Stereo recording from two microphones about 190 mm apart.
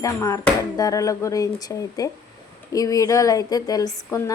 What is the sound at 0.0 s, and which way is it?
Speech, 15° left (ahead or behind).